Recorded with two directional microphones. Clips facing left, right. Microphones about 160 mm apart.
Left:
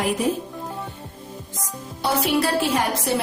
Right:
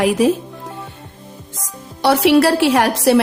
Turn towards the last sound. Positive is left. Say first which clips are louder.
# right 8 dB
turn(degrees=-85)